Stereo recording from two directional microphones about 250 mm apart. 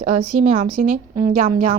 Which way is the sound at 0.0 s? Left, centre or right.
Right.